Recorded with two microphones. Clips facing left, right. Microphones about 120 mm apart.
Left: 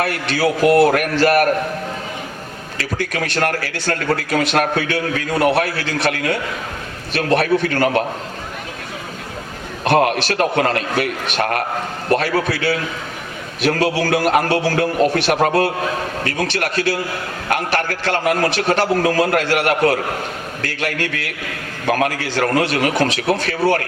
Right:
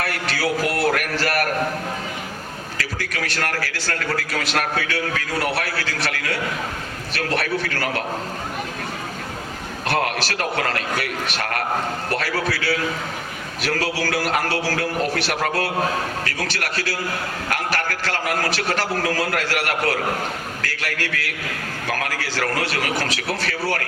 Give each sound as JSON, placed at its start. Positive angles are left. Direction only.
{"t": 0.0, "sound": "a man's voice", "side_deg": 25}
{"t": 2.7, "sound": "a man's voice", "side_deg": 25}
{"t": 9.8, "sound": "a man's voice", "side_deg": 20}